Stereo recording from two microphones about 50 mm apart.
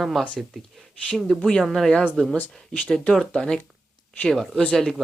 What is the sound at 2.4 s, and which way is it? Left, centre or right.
Speech, left.